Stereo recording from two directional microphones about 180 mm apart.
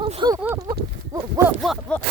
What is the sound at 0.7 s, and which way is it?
Speech, 55° right (ahead or behind).